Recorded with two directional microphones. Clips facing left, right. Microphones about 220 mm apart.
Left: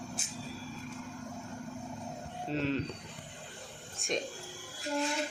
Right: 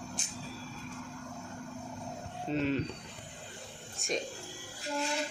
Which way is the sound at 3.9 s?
Centre (ahead or behind).